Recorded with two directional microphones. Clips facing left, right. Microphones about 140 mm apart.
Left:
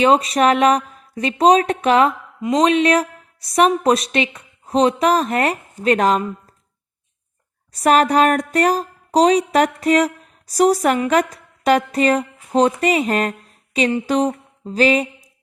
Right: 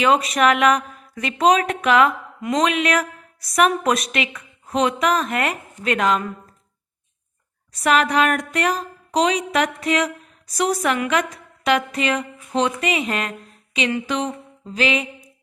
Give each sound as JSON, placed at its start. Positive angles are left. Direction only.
{"t": 0.0, "sound": "music", "side_deg": 30}
{"t": 7.7, "sound": "music", "side_deg": 40}
{"t": 14.1, "sound": "a sound", "side_deg": 40}